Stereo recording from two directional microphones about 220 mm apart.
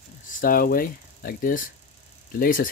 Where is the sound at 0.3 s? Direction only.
40° left (ahead or behind).